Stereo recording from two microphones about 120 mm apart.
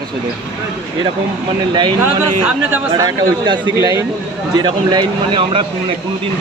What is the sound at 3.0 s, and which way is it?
Speech, 35° right (ahead or behind).